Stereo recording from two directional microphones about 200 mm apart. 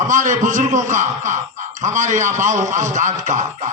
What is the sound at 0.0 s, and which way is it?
A man's voice, 40° right (ahead or behind).